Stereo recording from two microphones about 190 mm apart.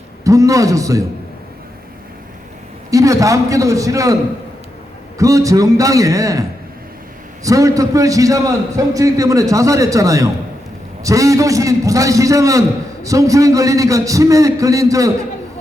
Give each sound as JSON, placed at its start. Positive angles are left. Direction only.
{"t": 0.3, "sound": "a man's voice", "side_deg": -15}
{"t": 2.9, "sound": "a man's voice", "side_deg": -15}
{"t": 7.4, "sound": "a man's voice", "side_deg": -15}